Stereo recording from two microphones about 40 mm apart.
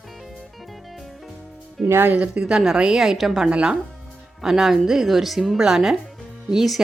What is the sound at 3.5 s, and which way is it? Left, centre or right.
Speech, right.